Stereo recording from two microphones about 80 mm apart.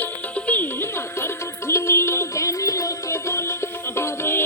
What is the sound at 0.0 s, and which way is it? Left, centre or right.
Music, left.